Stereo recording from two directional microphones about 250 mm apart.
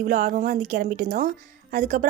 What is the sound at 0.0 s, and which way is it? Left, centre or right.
A woman's voice, right.